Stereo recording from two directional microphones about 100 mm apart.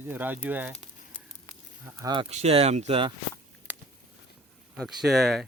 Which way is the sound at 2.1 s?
75° right (ahead or behind).